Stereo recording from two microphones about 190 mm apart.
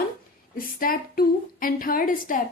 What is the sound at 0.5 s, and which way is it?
Speech, 50° left (ahead or behind).